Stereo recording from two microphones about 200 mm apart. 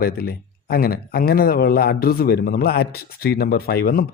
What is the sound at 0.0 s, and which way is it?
Speech, 50° left (ahead or behind).